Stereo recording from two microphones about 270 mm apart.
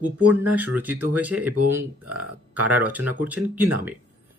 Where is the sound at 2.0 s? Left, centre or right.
Right.